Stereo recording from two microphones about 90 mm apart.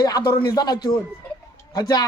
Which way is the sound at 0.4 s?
50° left (ahead or behind).